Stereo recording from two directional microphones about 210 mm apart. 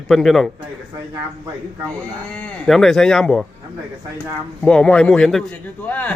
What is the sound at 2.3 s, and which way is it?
Speech, 5° left (ahead or behind).